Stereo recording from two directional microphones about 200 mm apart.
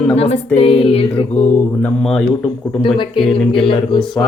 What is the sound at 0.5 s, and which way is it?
Mantra, 25° left (ahead or behind).